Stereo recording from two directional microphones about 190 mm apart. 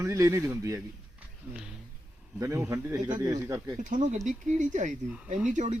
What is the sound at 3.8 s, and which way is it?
Speech, 40° right (ahead or behind).